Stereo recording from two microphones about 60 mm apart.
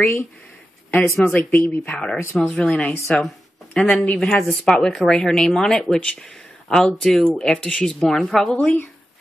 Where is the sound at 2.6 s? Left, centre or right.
Centre.